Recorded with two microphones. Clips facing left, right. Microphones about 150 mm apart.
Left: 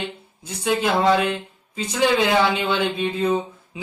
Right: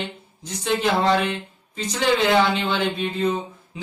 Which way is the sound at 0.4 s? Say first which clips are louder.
Left 1 dB; 10° left (ahead or behind).